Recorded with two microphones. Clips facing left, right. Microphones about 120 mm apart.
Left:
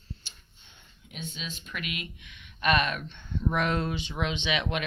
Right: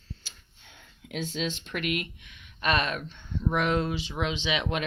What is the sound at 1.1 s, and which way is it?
Speech, 90° right.